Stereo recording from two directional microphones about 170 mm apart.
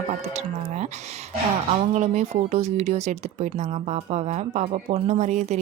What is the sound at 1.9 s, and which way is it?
Speech, 40° right (ahead or behind).